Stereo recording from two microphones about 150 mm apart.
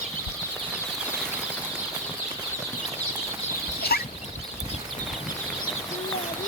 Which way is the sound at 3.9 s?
90° left.